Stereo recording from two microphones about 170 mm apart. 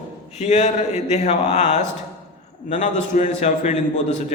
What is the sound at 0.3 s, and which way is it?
A man's voice, 45° left (ahead or behind).